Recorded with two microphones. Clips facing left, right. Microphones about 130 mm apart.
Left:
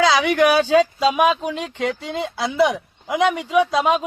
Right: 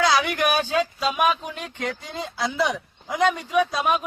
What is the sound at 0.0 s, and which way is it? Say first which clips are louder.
Speech: left 5 dB; 90° left.